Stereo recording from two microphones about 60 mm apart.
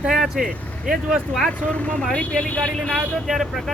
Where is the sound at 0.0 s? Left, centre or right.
Centre.